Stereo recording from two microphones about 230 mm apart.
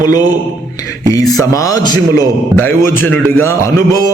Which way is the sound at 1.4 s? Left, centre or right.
Centre.